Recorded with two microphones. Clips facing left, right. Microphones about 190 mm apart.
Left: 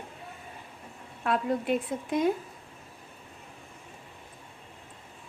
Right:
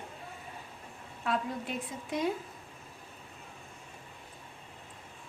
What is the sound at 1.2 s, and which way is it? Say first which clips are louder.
A woman's voice: left 5 dB; 60° left (ahead or behind).